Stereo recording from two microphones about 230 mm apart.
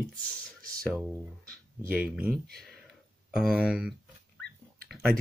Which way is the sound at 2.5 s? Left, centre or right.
Centre.